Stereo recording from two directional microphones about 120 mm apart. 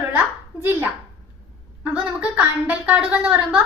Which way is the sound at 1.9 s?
10° right (ahead or behind).